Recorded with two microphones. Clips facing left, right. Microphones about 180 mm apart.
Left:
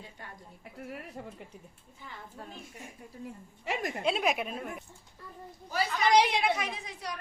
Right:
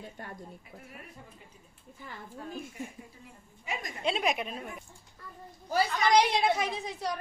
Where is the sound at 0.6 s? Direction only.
70° left (ahead or behind).